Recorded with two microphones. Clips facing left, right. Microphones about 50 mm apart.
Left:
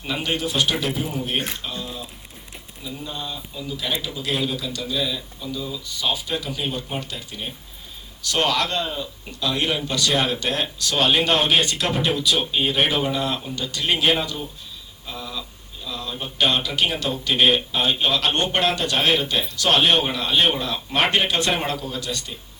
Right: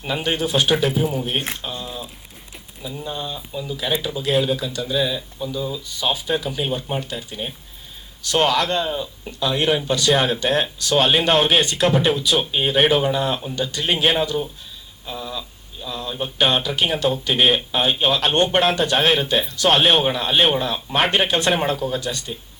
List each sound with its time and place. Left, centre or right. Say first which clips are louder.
0.1 s a man's voice: right 3 dB; right
0.9 s speech: right 5 dB; right
1.5 s a man's voice: right 1 dB; right
8.4 s a man's voice: right 3 dB; right